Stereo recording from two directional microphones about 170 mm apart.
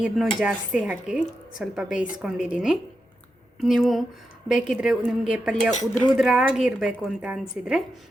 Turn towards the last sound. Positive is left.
turn(degrees=-5)  # may be behind; listen again after turning